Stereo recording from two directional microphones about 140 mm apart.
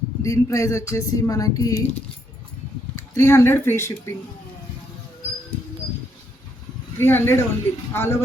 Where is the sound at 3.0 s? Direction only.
20° left (ahead or behind).